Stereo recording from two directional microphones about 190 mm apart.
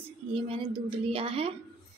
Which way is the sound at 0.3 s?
25° right (ahead or behind).